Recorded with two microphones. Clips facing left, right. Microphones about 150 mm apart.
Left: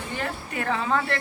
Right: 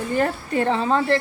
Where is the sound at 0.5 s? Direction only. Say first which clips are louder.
Right 5 dB; 30° right (ahead or behind).